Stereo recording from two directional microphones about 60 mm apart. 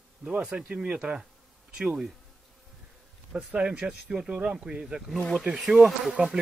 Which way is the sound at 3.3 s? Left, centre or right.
Centre.